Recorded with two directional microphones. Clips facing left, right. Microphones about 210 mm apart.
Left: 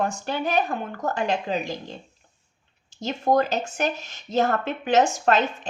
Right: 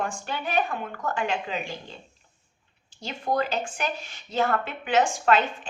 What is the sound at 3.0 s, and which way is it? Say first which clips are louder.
Speech: left 6 dB; 45° left (ahead or behind).